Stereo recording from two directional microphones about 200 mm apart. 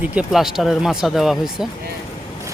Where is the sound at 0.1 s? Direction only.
5° right (ahead or behind).